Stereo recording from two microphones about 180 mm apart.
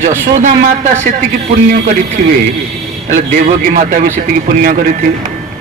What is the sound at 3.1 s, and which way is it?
Speech, 50° right (ahead or behind).